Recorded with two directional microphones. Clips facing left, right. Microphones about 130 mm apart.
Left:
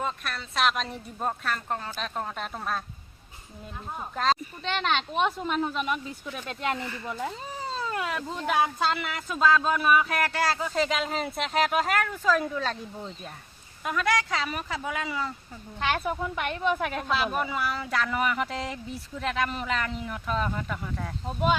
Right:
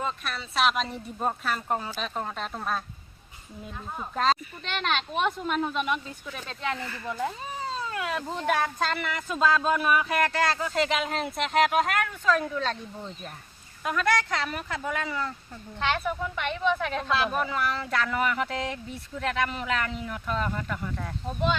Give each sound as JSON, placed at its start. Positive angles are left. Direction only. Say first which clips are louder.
{"t": 0.0, "sound": "speech", "louder": "even", "side_deg": 0}
{"t": 4.1, "sound": "speech", "louder": "right 1 dB", "side_deg": 0}
{"t": 6.5, "sound": "speech", "louder": "left 2 dB", "side_deg": 20}
{"t": 8.8, "sound": "speech", "louder": "left 1 dB", "side_deg": 5}
{"t": 13.8, "sound": "speech", "louder": "right 1 dB", "side_deg": 0}